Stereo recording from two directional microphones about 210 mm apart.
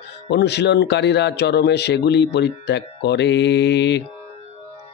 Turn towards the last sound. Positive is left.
turn(degrees=55)  # may be behind; listen again after turning